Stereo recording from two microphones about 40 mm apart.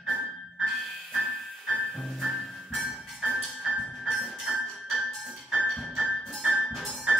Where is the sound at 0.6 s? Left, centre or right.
Centre.